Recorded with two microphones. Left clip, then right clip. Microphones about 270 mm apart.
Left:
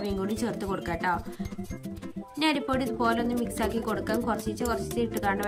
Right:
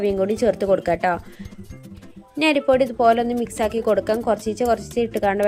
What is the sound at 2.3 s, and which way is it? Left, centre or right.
A woman's voice, centre.